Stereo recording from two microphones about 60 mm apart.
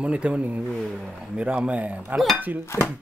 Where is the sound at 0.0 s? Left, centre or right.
Centre.